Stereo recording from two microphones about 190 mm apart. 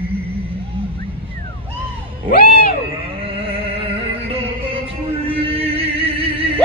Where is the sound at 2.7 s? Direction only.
30° right (ahead or behind).